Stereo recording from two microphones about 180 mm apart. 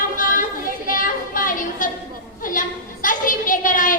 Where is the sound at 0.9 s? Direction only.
50° left (ahead or behind).